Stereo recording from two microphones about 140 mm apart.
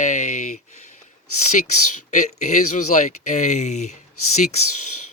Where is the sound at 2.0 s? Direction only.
60° left (ahead or behind).